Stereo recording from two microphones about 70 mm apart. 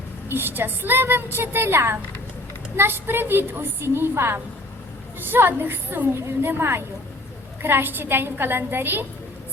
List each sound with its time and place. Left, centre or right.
0.3 s a woman's voice: right